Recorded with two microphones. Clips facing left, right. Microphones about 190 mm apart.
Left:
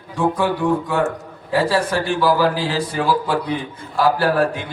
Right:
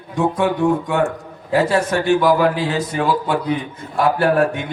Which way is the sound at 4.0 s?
30° left (ahead or behind).